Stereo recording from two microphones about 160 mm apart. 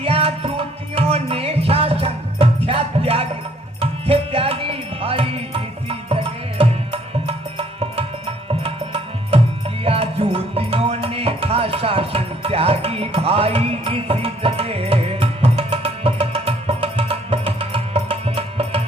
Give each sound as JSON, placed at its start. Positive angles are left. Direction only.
{"t": 0.0, "sound": "music", "side_deg": -35}
{"t": 8.4, "sound": "music", "side_deg": -35}